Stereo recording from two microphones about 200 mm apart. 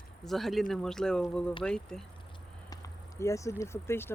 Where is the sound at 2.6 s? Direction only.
15° left (ahead or behind).